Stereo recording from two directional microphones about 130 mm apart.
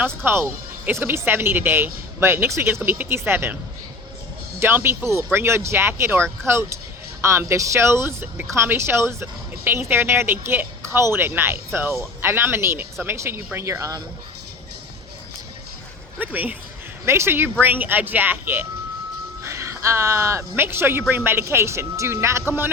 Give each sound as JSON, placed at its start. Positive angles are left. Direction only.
{"t": 0.2, "sound": "speech", "side_deg": -15}
{"t": 4.6, "sound": "speech", "side_deg": -15}
{"t": 16.1, "sound": "speech", "side_deg": -10}